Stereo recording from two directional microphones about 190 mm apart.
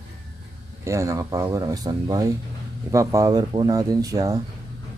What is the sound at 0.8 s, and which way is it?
Speech, 15° right (ahead or behind).